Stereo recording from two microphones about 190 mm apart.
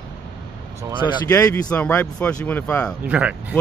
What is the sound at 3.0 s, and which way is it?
Speech, 5° right (ahead or behind).